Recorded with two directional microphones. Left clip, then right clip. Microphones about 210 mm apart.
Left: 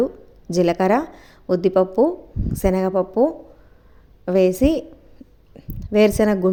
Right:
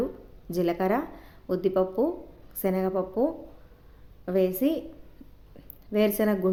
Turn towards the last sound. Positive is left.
turn(degrees=35)  # may be behind; listen again after turning